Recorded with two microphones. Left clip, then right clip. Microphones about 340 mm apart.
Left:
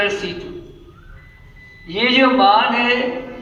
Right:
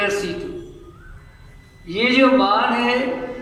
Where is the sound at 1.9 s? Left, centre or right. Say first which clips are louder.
Left 1 dB; left.